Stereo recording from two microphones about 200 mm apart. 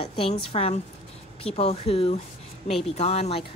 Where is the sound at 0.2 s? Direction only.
25° left (ahead or behind).